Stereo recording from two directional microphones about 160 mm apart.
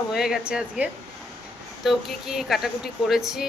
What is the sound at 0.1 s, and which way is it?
Speech, 5° right (ahead or behind).